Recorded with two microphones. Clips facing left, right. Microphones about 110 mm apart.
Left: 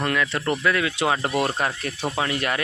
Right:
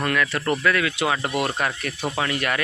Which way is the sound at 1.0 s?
30° left (ahead or behind).